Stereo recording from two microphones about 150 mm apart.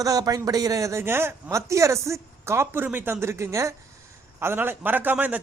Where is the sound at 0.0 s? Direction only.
25° right (ahead or behind).